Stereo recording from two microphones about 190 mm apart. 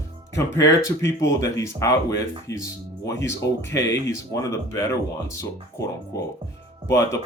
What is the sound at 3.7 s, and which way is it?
Speech, 15° left (ahead or behind).